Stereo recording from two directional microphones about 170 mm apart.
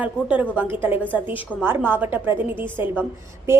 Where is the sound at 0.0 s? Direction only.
10° right (ahead or behind).